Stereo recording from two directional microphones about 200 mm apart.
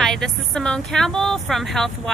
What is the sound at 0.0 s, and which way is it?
Speech, 5° left (ahead or behind).